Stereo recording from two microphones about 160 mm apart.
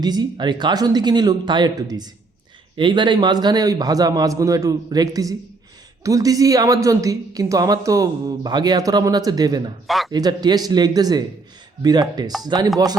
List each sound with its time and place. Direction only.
0.0 s a woman's voice: 25° right (ahead or behind)
9.8 s a man's voice: centre (ahead or behind)
10.1 s a woman's voice: 25° right (ahead or behind)